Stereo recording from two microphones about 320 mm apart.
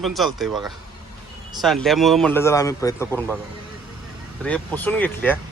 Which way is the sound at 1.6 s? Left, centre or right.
Centre.